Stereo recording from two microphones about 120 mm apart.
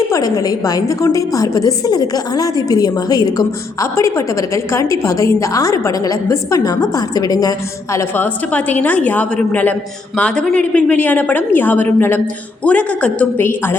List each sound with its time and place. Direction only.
0.1 s a woman's voice: 30° left (ahead or behind)
7.9 s a woman's voice: 15° left (ahead or behind)